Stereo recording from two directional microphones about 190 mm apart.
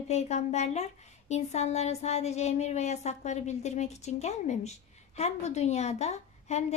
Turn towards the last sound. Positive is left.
turn(degrees=35)  # may be behind; listen again after turning